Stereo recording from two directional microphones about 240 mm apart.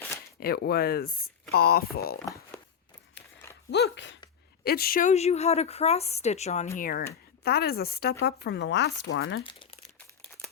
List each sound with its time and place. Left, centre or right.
0.3 s speech: left
2.1 s speech: centre
3.7 s a woman's voice: left
9.4 s a woman's voice: centre